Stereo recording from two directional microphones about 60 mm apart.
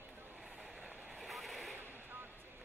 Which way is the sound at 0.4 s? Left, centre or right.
Centre.